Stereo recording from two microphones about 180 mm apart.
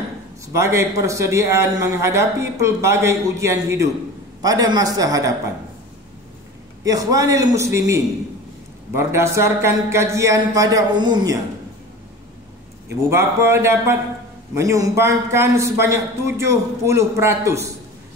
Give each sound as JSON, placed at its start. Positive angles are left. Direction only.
{"t": 0.6, "sound": "a man's voice", "side_deg": -15}
{"t": 6.8, "sound": "a man's voice", "side_deg": -20}
{"t": 13.1, "sound": "a man's voice", "side_deg": -15}